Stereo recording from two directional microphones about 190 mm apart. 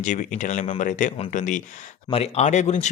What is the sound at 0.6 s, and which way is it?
Speech, 30° left (ahead or behind).